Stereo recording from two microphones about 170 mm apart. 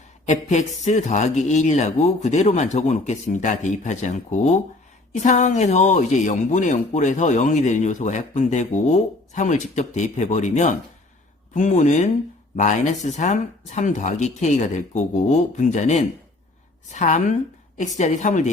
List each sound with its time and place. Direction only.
0.3 s speech: 45° left (ahead or behind)